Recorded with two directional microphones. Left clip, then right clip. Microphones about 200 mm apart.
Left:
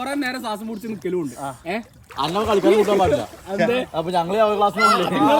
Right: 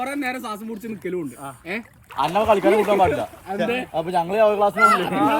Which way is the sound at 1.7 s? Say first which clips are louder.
Left 3 dB; 5° left (ahead or behind).